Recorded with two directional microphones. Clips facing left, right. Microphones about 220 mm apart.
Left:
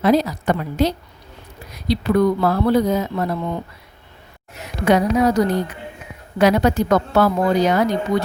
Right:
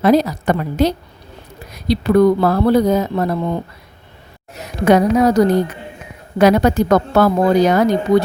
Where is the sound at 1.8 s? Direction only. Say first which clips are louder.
Right 5 dB; 40° right (ahead or behind).